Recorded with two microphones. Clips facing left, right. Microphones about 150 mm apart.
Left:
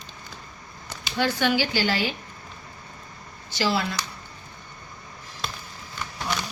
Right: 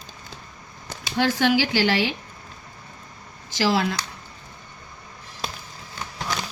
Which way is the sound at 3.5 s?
90° right.